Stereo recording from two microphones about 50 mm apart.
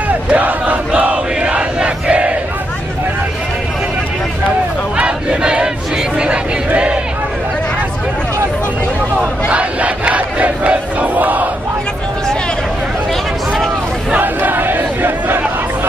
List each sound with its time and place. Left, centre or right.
0.1 s battle cry: right
4.9 s battle cry: centre
6.1 s a sound: centre
9.5 s crowd: right
14.2 s crowd: right